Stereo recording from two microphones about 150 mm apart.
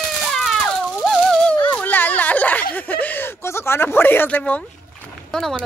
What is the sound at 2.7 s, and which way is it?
Speech, 10° left (ahead or behind).